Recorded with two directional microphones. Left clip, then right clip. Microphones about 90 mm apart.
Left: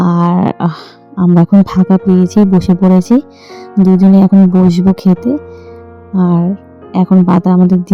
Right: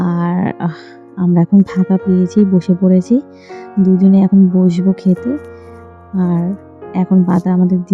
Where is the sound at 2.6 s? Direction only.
50° left (ahead or behind).